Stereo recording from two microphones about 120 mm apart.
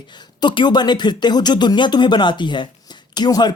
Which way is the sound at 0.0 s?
40° left (ahead or behind).